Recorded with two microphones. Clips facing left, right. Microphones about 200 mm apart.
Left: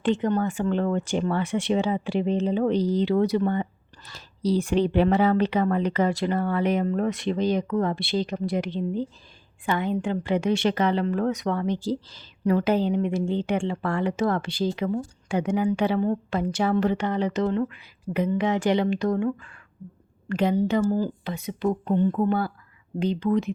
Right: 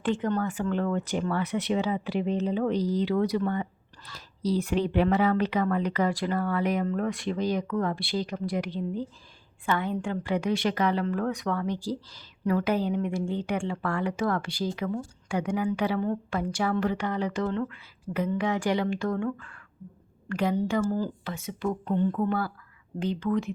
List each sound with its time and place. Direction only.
0.0 s a woman's voice: 25° left (ahead or behind)